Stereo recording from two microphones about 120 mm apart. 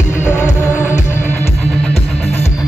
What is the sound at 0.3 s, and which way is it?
Music, 20° left (ahead or behind).